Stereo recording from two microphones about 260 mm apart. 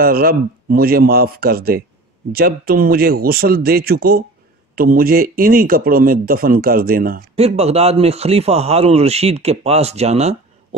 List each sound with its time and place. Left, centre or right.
0.0 s speech: right